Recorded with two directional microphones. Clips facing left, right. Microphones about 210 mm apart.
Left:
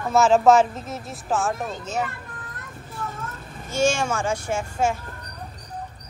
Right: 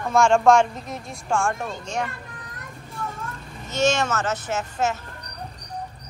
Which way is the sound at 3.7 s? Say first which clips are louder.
Even; 10° left (ahead or behind).